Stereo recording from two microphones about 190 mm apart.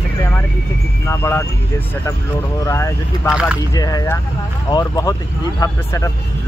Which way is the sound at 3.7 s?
20° left (ahead or behind).